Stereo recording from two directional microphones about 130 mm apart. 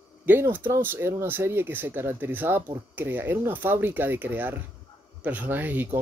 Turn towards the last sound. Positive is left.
turn(degrees=-15)  # may be behind; listen again after turning